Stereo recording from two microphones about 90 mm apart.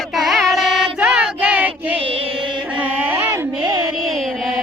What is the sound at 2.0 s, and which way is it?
Music, 90° right.